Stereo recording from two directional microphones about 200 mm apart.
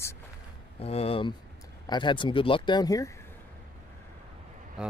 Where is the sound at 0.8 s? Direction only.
30° left (ahead or behind).